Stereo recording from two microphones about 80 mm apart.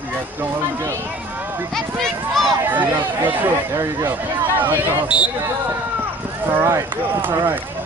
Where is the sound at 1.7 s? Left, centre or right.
Centre.